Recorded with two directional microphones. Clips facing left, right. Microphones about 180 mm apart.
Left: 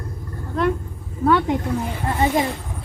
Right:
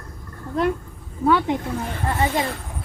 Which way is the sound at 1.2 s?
Centre (ahead or behind).